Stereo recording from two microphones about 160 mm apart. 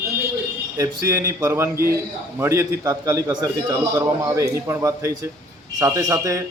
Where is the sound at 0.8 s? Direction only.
20° right (ahead or behind).